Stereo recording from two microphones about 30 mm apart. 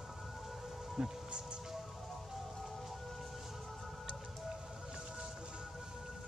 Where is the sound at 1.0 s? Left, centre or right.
Right.